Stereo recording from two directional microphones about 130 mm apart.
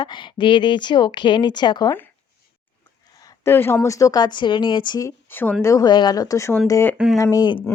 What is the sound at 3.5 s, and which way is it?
A woman's voice, 20° left (ahead or behind).